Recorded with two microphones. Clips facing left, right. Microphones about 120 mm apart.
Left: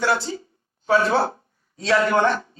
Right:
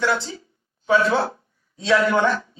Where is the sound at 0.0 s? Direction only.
5° left (ahead or behind).